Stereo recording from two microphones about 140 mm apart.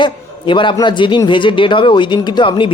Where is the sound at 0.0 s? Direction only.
35° left (ahead or behind).